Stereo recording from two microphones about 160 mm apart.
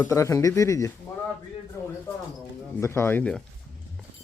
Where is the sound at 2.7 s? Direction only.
15° left (ahead or behind).